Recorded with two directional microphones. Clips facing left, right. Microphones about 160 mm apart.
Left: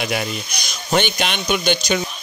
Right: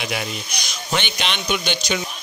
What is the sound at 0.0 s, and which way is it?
A man's voice, 50° left (ahead or behind).